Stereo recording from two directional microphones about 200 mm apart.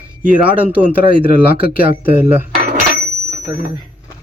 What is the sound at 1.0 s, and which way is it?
Speech, 45° left (ahead or behind).